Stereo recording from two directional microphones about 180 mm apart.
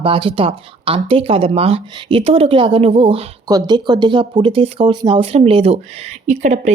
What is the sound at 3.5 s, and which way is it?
Speech, 20° right (ahead or behind).